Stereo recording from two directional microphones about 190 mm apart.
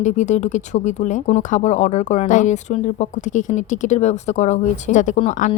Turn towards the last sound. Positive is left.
turn(degrees=35)  # may be behind; listen again after turning